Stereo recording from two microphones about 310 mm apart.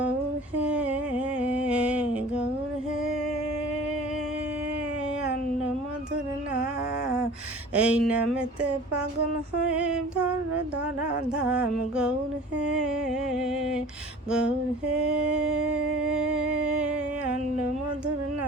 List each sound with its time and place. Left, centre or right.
0.6 s humming: centre
7.7 s speech: centre
9.7 s speech: centre
11.3 s speech: centre
14.9 s mantra: right
15.4 s speech: centre
16.3 s music: centre